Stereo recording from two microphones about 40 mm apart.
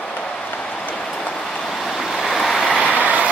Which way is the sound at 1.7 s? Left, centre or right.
Centre.